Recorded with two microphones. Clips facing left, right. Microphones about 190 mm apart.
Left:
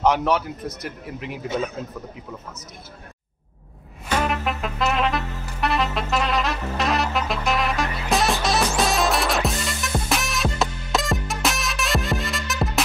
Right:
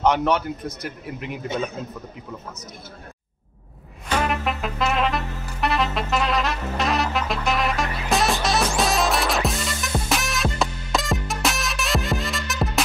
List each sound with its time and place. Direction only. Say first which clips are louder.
0.0 s a man's voice: even; centre (ahead or behind)
4.1 s music: even; centre (ahead or behind)